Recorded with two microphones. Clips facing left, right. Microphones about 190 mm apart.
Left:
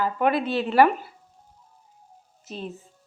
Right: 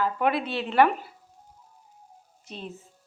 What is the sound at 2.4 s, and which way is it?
Speech, centre (ahead or behind).